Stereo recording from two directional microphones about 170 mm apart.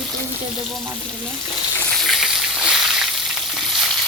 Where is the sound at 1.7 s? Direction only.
10° left (ahead or behind).